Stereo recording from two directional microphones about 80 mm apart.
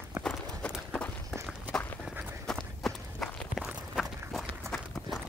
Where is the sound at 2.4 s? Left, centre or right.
Centre.